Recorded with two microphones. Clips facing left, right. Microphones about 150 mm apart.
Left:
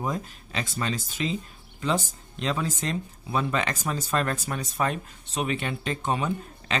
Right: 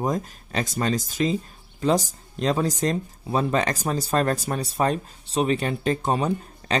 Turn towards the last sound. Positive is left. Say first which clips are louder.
# right 4 dB
turn(degrees=-35)  # may be behind; listen again after turning